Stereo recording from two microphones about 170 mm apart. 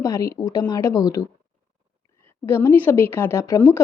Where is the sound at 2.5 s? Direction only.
10° left (ahead or behind).